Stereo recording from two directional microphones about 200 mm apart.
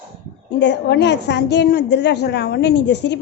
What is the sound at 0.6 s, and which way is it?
A woman's voice, 60° left (ahead or behind).